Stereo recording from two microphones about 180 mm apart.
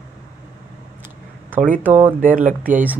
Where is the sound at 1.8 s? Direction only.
10° right (ahead or behind).